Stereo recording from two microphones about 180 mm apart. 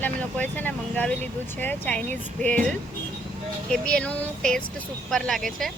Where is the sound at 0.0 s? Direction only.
10° left (ahead or behind).